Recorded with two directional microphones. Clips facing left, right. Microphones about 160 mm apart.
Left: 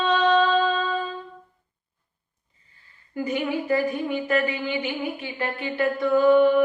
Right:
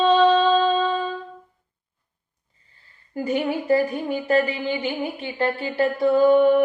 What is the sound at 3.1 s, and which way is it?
Speech, 30° right (ahead or behind).